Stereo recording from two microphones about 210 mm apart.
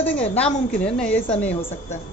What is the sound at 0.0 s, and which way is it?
A woman's voice, 5° left (ahead or behind).